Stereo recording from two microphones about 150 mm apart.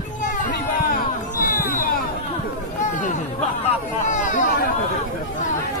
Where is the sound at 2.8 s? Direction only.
55° left (ahead or behind).